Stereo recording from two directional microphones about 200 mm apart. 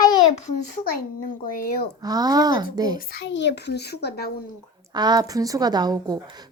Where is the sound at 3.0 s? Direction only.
60° left (ahead or behind).